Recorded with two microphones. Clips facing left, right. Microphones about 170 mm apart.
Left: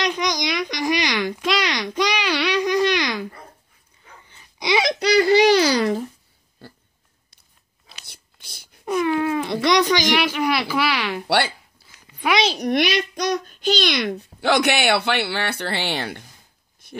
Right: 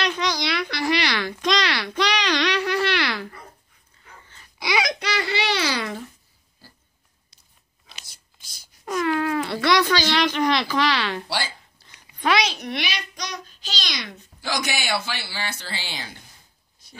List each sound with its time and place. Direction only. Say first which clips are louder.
0.0 s a sound: left 2 dB; 15° left (ahead or behind)
4.3 s a child's voice: left 5 dB; 15° left (ahead or behind); by 6.0 s 40° left (ahead or behind)
8.0 s whispering: left 4 dB; 60° left (ahead or behind)
8.8 s speech: left 3 dB; 15° left (ahead or behind)
11.2 s speech: left 8 dB; 60° left (ahead or behind)
11.8 s a sound: even; 10° left (ahead or behind)
12.4 s a child's voice: left 6 dB; 35° left (ahead or behind); by 16.2 s 65° left (ahead or behind)